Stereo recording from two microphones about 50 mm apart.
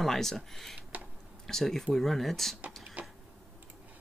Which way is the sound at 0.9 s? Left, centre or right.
Right.